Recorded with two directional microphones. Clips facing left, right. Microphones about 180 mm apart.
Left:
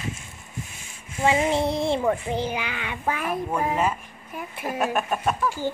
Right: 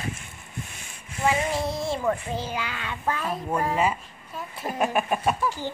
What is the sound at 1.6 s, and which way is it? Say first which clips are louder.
Speech: left 4 dB; 60° left (ahead or behind).